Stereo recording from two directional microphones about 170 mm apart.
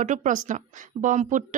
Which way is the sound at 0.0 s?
50° right (ahead or behind).